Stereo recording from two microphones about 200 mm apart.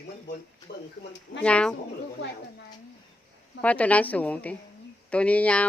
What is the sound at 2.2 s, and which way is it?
Speech, 55° left (ahead or behind).